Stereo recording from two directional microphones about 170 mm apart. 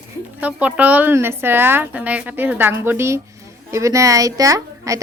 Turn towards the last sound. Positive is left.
turn(degrees=-20)  # may be behind; listen again after turning